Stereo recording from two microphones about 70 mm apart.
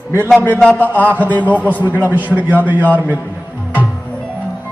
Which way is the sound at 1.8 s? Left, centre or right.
Right.